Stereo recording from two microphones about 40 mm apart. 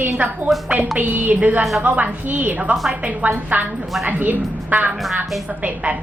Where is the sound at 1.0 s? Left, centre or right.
Right.